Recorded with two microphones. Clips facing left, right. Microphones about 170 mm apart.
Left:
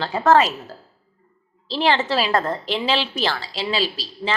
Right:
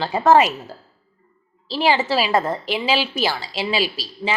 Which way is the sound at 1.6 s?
5° right (ahead or behind).